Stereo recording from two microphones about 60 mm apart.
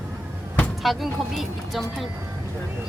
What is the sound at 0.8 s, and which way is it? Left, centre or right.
Speech, centre.